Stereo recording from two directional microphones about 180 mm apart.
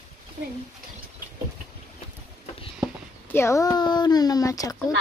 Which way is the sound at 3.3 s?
15° left (ahead or behind).